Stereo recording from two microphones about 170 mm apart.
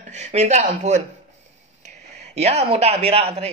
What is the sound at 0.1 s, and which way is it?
Speech, 40° right (ahead or behind).